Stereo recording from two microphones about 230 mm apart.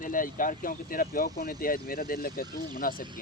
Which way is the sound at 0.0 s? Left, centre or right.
Left.